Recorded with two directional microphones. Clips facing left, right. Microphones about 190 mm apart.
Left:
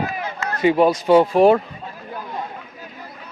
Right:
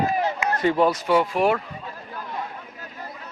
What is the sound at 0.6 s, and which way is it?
Speech, 15° left (ahead or behind).